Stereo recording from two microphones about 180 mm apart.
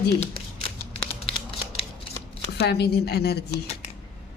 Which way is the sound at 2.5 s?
65° left (ahead or behind).